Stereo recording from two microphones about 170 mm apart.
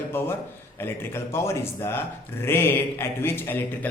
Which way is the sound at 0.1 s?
15° left (ahead or behind).